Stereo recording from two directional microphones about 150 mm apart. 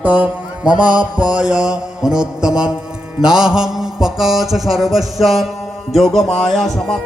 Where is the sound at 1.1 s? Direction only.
5° right (ahead or behind).